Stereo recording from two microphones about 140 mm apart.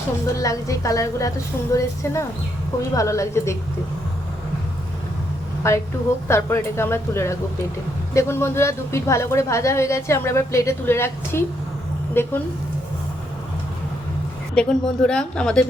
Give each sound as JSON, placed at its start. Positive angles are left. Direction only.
{"t": 0.3, "sound": "a woman's voice", "side_deg": 25}
{"t": 2.9, "sound": "a woman's voice", "side_deg": 20}
{"t": 5.6, "sound": "a woman's voice", "side_deg": 20}
{"t": 14.5, "sound": "speech", "side_deg": 5}